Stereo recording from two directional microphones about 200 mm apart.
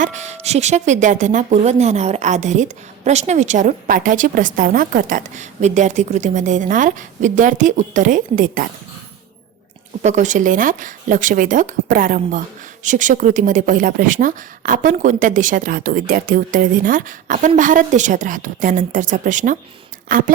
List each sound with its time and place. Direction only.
0.0 s speech: 35° right (ahead or behind)
10.0 s a woman's voice: 35° right (ahead or behind)